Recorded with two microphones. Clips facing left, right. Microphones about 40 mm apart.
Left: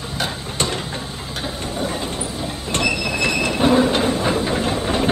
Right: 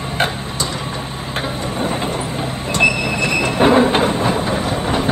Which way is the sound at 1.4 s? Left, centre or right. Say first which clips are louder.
Right 4 dB; right.